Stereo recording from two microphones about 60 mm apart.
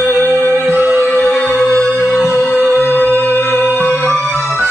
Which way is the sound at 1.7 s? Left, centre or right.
Left.